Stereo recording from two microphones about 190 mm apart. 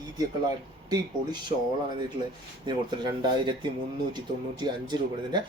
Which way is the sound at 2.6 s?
25° right (ahead or behind).